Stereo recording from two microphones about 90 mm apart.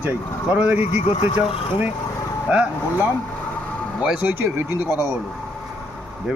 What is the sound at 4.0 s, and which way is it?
A man's voice, 15° right (ahead or behind).